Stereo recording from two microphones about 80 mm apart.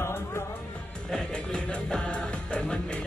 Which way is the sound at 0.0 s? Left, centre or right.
Left.